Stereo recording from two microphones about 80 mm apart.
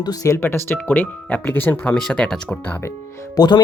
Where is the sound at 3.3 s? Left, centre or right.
Left.